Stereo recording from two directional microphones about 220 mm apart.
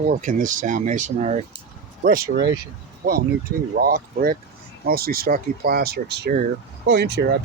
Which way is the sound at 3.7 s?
45° right (ahead or behind).